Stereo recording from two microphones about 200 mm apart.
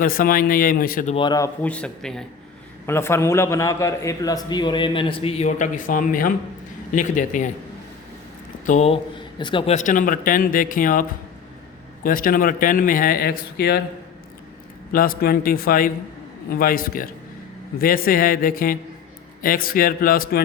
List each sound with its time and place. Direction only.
0.0 s speech: 45° left (ahead or behind)
1.1 s a man's voice: 20° left (ahead or behind)
1.6 s a man's voice: 5° left (ahead or behind); by 7.5 s 40° left (ahead or behind)
8.6 s a man's voice: 35° left (ahead or behind)
12.0 s speech: 45° left (ahead or behind)
14.9 s speech: 45° left (ahead or behind)